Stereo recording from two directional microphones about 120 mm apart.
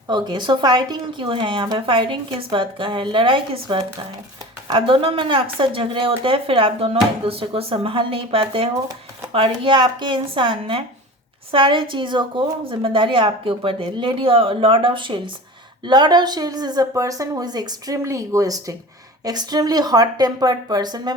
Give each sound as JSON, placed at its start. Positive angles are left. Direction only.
{"t": 0.1, "sound": "a woman's voice", "side_deg": -40}